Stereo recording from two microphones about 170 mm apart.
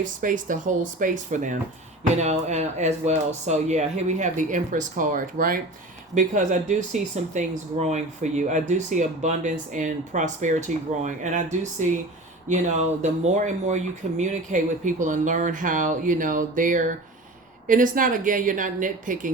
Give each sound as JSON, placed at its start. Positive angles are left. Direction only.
{"t": 0.0, "sound": "speech", "side_deg": -50}